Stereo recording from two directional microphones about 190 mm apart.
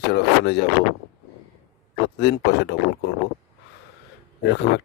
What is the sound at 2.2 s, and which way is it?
Speech, 60° left (ahead or behind).